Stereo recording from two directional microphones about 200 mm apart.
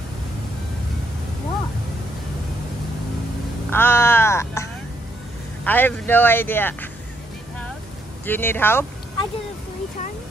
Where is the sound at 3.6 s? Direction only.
10° left (ahead or behind).